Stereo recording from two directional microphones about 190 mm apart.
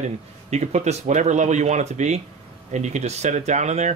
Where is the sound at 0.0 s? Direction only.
35° right (ahead or behind).